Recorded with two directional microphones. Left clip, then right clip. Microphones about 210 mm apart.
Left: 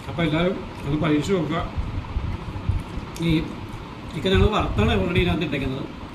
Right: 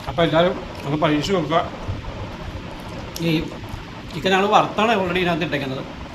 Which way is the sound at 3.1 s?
15° left (ahead or behind).